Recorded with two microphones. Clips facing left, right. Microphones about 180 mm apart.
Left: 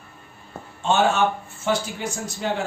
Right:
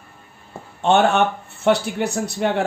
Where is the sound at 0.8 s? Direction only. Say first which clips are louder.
Right 4 dB; 65° right (ahead or behind).